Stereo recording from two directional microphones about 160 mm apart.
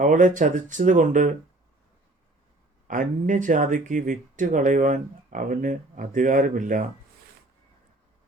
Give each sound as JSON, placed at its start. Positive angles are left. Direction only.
{"t": 0.0, "sound": "speech", "side_deg": -55}
{"t": 2.8, "sound": "speech", "side_deg": -55}